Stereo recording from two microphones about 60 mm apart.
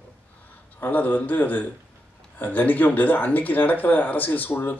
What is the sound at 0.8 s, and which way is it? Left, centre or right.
A man's voice, left.